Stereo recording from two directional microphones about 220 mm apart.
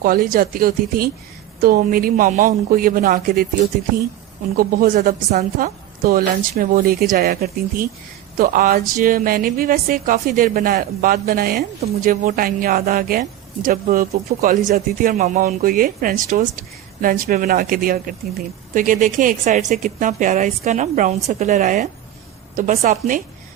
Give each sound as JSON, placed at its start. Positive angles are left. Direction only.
{"t": 0.0, "sound": "speech", "side_deg": -40}
{"t": 4.5, "sound": "speech", "side_deg": -35}